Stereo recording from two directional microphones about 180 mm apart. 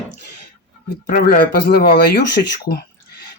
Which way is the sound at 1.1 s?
50° left (ahead or behind).